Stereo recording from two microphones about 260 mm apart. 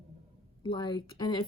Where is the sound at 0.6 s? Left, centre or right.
Centre.